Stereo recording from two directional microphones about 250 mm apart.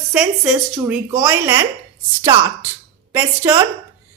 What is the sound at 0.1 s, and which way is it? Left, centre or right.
A woman's voice, centre.